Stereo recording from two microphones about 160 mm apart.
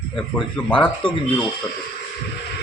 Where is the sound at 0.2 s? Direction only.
5° left (ahead or behind).